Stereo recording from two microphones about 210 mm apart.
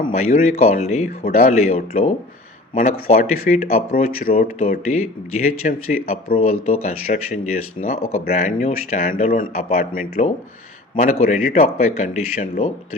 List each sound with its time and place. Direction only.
0.0 s speech: 30° left (ahead or behind)